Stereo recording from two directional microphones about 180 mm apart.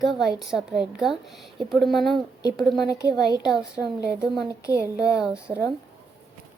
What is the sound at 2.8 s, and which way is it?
Speech, 20° left (ahead or behind).